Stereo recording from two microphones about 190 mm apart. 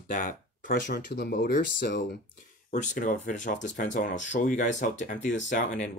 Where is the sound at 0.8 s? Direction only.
60° left (ahead or behind).